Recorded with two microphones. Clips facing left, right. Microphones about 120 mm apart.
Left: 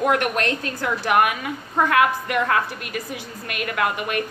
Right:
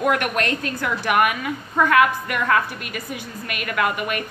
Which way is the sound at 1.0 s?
35° left (ahead or behind).